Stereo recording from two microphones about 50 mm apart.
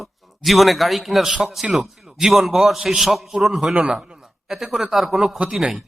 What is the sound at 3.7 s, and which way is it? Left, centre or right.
Speech, centre.